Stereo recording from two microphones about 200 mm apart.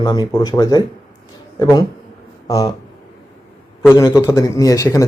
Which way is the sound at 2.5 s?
15° left (ahead or behind).